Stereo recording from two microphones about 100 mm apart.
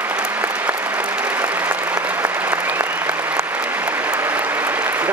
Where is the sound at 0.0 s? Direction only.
15° right (ahead or behind).